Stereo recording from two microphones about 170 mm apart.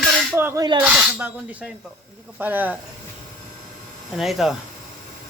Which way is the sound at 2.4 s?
10° right (ahead or behind).